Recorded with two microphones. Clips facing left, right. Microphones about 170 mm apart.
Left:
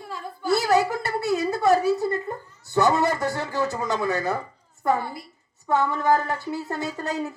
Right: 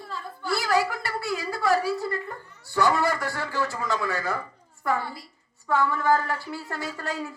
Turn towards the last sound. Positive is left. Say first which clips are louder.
# left 4 dB
turn(degrees=20)  # may be behind; listen again after turning